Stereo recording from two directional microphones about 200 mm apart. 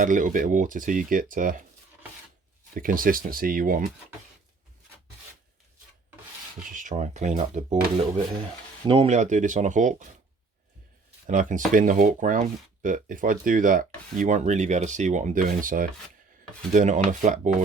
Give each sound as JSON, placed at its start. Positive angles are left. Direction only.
{"t": 0.0, "sound": "speech", "side_deg": -40}
{"t": 2.7, "sound": "speech", "side_deg": -45}
{"t": 6.7, "sound": "speech", "side_deg": -40}
{"t": 11.3, "sound": "speech", "side_deg": -40}